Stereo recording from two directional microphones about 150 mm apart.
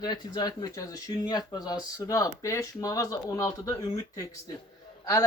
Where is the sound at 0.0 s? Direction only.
25° left (ahead or behind).